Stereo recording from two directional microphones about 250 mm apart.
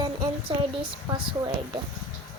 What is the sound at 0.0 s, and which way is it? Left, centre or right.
Speech, centre.